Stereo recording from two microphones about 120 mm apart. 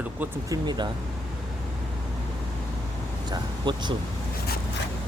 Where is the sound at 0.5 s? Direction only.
35° right (ahead or behind).